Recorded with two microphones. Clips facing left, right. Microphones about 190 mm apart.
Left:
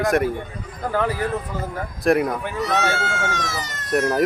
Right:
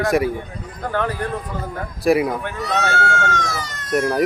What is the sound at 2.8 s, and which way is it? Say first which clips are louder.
Speech: right 3 dB; 20° left (ahead or behind).